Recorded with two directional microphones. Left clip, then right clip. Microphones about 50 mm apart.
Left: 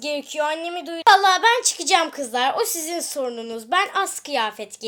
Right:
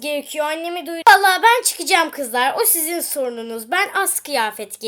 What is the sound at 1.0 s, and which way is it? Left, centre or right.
A woman's voice, centre.